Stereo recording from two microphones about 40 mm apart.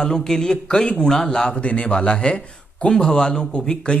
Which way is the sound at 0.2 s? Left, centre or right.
Centre.